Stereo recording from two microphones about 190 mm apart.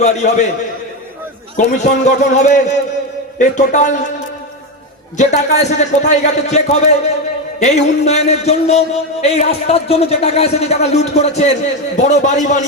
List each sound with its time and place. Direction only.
0.0 s a man's voice: 40° left (ahead or behind)
1.5 s a man's voice: 40° left (ahead or behind)
5.1 s a man's voice: 35° left (ahead or behind)